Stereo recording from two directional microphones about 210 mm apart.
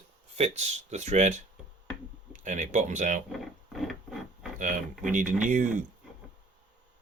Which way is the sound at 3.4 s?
Centre (ahead or behind).